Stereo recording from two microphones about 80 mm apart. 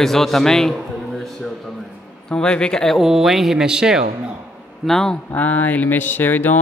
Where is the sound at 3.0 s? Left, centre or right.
Centre.